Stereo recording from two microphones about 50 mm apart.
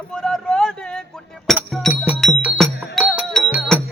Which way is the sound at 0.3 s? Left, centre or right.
Centre.